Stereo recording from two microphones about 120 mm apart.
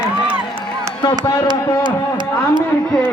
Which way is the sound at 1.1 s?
40° right (ahead or behind).